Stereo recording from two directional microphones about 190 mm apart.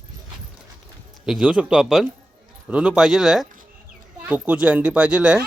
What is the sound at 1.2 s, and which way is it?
Speech, 5° right (ahead or behind).